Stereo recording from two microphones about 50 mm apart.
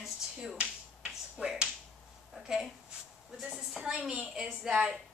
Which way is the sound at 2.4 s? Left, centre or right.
Centre.